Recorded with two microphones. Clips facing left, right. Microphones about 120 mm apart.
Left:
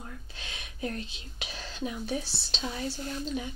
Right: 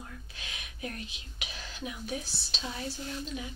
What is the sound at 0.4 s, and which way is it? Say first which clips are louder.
Whispering: left 5 dB; 30° left (ahead or behind).